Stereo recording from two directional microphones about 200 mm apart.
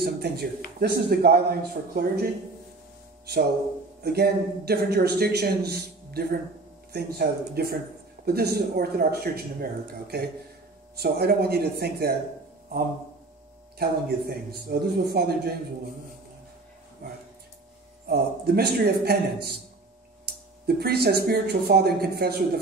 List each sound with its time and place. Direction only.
0.0 s a man's voice: 55° right (ahead or behind)
4.0 s a man's voice: 50° right (ahead or behind)
13.7 s a man's voice: 50° right (ahead or behind)
17.0 s a man's voice: 55° right (ahead or behind)